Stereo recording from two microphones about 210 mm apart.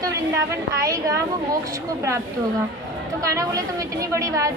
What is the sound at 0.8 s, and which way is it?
Speech, 15° right (ahead or behind).